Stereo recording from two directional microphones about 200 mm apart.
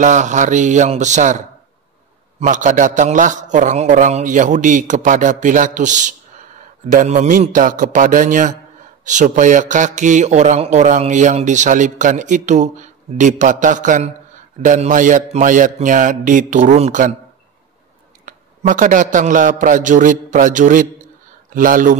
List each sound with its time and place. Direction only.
0.0 s speech: 35° right (ahead or behind)
2.4 s speech: 40° right (ahead or behind)
18.2 s a man's voice: 40° right (ahead or behind)